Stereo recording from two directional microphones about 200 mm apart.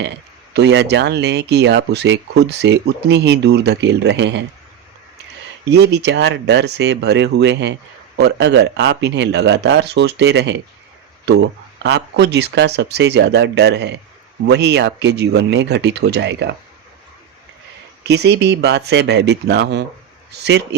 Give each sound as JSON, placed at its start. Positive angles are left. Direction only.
{"t": 0.5, "sound": "speech", "side_deg": -60}
{"t": 5.6, "sound": "speech", "side_deg": -55}
{"t": 11.8, "sound": "speech", "side_deg": -60}
{"t": 18.0, "sound": "speech", "side_deg": -55}